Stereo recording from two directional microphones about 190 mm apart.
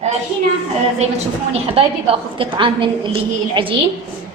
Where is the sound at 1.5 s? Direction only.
30° right (ahead or behind).